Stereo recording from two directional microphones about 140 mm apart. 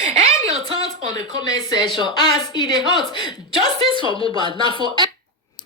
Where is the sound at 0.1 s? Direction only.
55° right (ahead or behind).